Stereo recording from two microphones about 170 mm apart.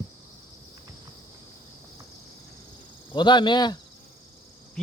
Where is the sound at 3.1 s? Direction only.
25° left (ahead or behind).